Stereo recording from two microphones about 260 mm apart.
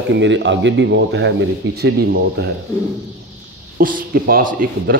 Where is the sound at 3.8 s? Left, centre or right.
Right.